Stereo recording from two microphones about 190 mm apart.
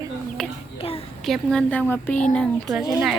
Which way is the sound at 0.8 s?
30° left (ahead or behind).